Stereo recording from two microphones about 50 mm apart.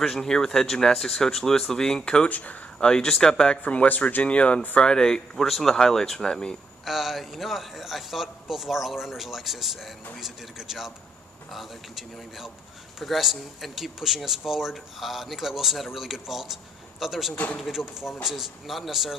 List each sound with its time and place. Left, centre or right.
0.0 s speech: centre
2.2 s speech: left
2.8 s speech: centre
3.6 s speech: left
4.7 s speech: centre
6.8 s a man's voice: centre